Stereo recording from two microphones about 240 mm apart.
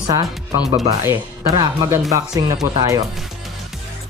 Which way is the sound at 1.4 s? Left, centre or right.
Right.